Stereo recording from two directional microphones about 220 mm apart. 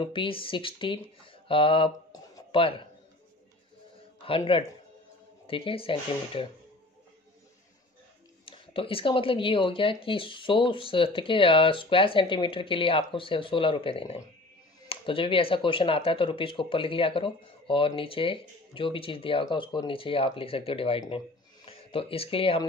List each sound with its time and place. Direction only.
0.0 s speech: 25° left (ahead or behind)
4.2 s speech: 25° left (ahead or behind)
8.5 s speech: 25° left (ahead or behind)